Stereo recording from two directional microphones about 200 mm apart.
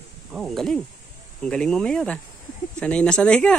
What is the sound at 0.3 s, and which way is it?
Speech, centre (ahead or behind).